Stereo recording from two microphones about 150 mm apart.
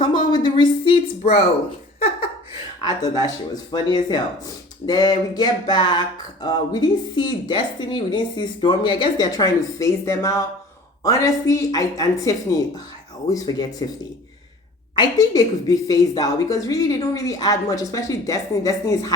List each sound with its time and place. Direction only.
0.0 s speech: 30° left (ahead or behind)
2.8 s speech: 25° left (ahead or behind)
13.3 s speech: 25° left (ahead or behind)
14.9 s speech: 25° left (ahead or behind)